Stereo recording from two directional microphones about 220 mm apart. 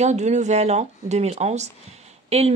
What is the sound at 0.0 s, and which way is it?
A woman's voice, 30° right (ahead or behind).